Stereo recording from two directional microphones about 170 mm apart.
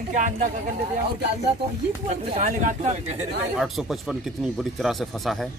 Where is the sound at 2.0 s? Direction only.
45° right (ahead or behind).